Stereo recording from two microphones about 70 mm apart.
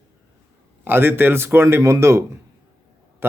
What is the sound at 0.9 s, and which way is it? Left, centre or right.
A man's voice, right.